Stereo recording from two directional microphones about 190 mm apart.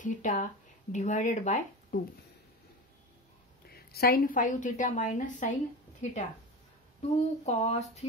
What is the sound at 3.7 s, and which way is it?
A woman's voice, 55° left (ahead or behind).